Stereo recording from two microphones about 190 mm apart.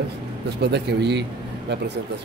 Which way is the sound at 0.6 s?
65° right (ahead or behind).